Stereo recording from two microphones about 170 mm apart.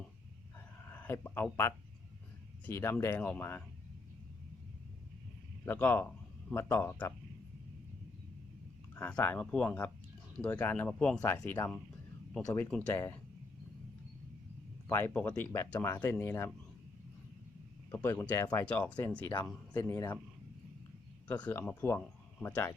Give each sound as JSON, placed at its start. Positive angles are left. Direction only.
{"t": 0.9, "sound": "speech", "side_deg": 10}
{"t": 5.6, "sound": "speech", "side_deg": 10}
{"t": 9.0, "sound": "speech", "side_deg": 10}
{"t": 11.5, "sound": "speech", "side_deg": 20}
{"t": 12.9, "sound": "speech", "side_deg": 10}
{"t": 14.8, "sound": "speech", "side_deg": 10}
{"t": 17.9, "sound": "speech", "side_deg": 10}
{"t": 21.2, "sound": "speech", "side_deg": 10}